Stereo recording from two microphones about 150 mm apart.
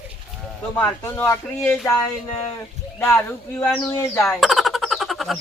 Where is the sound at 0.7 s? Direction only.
15° left (ahead or behind).